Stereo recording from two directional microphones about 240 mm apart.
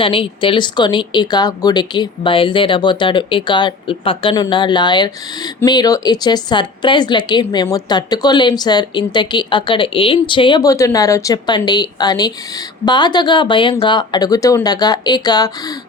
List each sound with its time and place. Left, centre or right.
0.0 s speech: left